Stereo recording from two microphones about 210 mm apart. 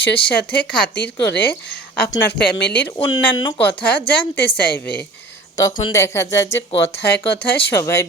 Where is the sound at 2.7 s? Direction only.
10° left (ahead or behind).